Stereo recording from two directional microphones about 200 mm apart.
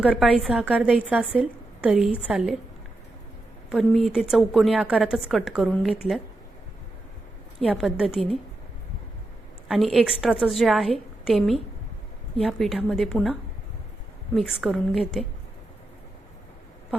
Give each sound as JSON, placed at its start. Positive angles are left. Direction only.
{"t": 0.0, "sound": "a woman's voice", "side_deg": -5}
{"t": 3.7, "sound": "a woman's voice", "side_deg": 0}
{"t": 7.6, "sound": "a woman's voice", "side_deg": 0}
{"t": 9.6, "sound": "a woman's voice", "side_deg": 0}
{"t": 14.3, "sound": "a woman's voice", "side_deg": 0}